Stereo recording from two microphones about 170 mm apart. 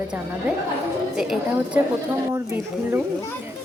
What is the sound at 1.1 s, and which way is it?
A woman's voice, 5° right (ahead or behind).